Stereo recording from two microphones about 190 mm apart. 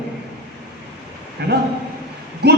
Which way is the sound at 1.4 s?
55° right (ahead or behind).